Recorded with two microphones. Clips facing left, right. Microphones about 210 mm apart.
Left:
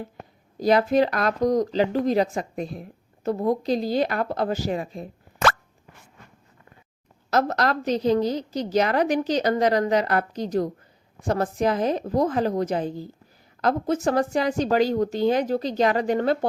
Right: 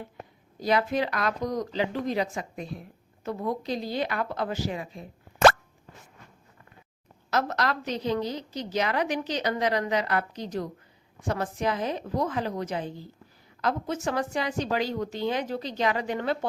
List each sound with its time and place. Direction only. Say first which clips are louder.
0.6 s a woman's voice: left 6 dB; 40° left (ahead or behind)
7.3 s a woman's voice: left 5 dB; 40° left (ahead or behind)